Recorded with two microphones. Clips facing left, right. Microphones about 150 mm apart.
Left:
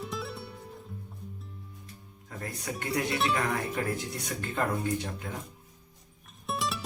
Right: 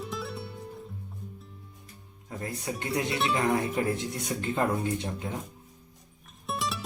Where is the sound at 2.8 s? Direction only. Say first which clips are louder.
Even; 20° right (ahead or behind).